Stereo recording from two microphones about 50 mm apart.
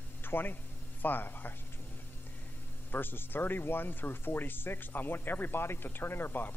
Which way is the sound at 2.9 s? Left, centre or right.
Left.